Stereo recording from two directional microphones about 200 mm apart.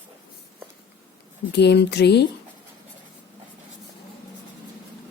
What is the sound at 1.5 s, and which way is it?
Speech, 55° left (ahead or behind).